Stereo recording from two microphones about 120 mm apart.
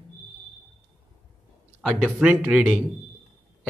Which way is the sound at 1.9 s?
10° right (ahead or behind).